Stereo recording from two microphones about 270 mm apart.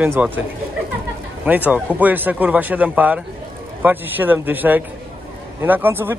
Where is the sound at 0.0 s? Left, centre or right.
Centre.